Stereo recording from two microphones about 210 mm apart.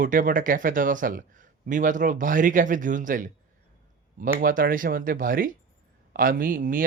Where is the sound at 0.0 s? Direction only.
40° right (ahead or behind).